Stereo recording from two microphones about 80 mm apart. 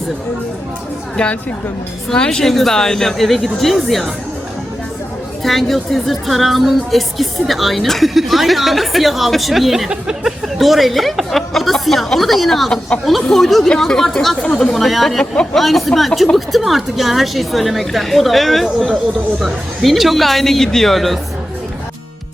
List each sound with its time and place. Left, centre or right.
1.1 s a woman's voice: centre
5.4 s speech: centre
14.4 s a woman's voice: centre
14.7 s speech: centre